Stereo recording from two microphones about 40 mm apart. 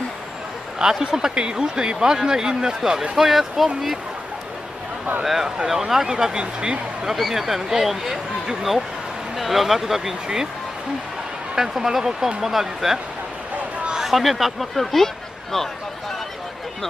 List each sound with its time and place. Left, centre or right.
0.8 s speech: centre
5.2 s speech: centre; by 7.1 s right
7.1 s speech: centre
9.4 s speech: centre
11.5 s speech: centre